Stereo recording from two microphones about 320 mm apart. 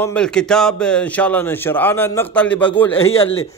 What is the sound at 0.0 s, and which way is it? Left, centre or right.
A man's voice, centre.